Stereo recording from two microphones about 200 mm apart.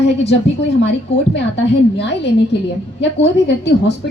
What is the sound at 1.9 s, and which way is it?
A woman's voice, 60° left (ahead or behind).